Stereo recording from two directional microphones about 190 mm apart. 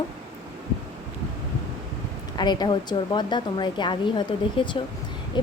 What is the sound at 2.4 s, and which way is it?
A woman's voice, 20° left (ahead or behind).